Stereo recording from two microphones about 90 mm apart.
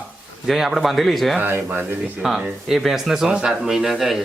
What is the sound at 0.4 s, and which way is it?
Speech, centre (ahead or behind).